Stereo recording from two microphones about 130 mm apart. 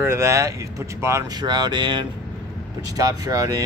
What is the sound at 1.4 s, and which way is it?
Speech, 35° right (ahead or behind).